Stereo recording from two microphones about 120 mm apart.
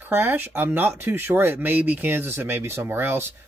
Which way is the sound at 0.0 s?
15° right (ahead or behind).